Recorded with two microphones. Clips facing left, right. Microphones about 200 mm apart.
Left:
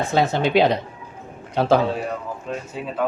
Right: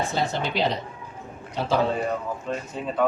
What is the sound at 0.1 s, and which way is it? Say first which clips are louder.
Speech: left 8 dB; 60° left (ahead or behind).